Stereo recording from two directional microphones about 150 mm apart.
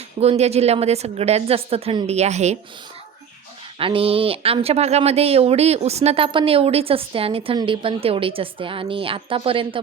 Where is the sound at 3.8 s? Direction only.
35° right (ahead or behind).